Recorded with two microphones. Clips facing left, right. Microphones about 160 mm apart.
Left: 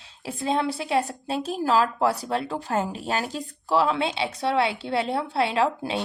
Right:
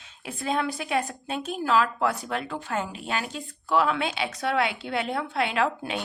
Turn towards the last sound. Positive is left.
turn(degrees=30)  # may be behind; listen again after turning